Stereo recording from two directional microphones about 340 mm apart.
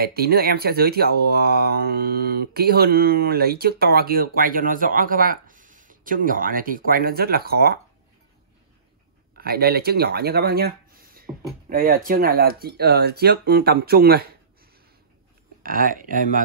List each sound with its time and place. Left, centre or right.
0.0 s speech: right
9.4 s speech: right
11.3 s speech: centre
11.7 s speech: right
15.6 s speech: right